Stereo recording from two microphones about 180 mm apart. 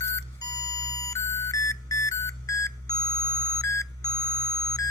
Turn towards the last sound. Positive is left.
turn(degrees=20)  # may be behind; listen again after turning